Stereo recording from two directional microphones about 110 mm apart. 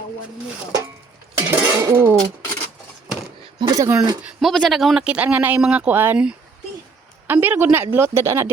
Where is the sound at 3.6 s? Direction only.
40° right (ahead or behind).